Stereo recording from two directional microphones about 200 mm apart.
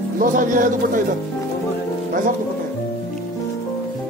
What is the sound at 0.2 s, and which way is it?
Speech, 40° right (ahead or behind).